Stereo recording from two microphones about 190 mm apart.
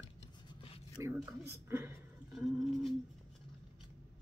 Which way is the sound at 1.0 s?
15° right (ahead or behind).